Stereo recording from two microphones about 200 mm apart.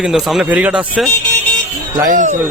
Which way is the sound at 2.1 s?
40° right (ahead or behind).